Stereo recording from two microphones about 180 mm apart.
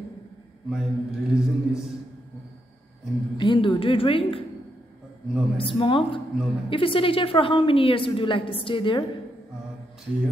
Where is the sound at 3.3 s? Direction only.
25° left (ahead or behind).